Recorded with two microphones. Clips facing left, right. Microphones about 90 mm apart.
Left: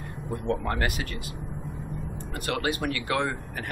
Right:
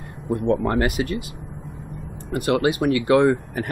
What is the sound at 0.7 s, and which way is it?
Speech, 20° right (ahead or behind).